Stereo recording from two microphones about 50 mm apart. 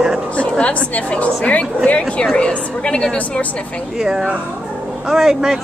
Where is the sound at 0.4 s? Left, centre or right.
Left.